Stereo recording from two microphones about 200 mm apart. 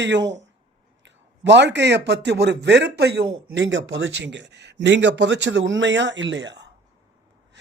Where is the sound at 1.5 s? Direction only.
60° right (ahead or behind).